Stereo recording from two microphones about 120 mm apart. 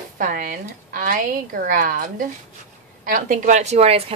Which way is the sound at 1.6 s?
90° right.